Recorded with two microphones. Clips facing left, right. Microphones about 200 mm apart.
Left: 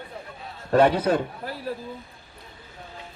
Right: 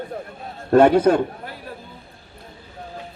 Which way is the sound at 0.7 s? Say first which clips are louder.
Right 6 dB; 50° right (ahead or behind).